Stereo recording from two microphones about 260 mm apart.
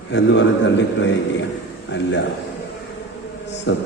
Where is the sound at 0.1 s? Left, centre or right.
Left.